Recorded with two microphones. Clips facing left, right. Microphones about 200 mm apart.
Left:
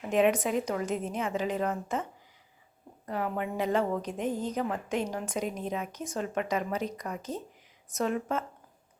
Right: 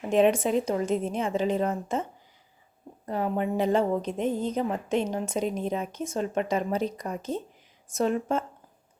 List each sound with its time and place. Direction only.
0.1 s a woman's voice: 30° right (ahead or behind)
3.1 s a woman's voice: 30° right (ahead or behind)